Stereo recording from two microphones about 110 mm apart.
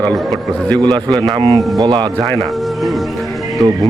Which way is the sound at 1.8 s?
40° right (ahead or behind).